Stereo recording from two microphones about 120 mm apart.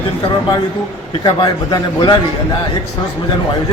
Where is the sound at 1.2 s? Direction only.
35° left (ahead or behind).